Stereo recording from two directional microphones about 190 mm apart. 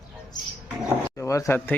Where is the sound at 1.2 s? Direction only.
15° left (ahead or behind).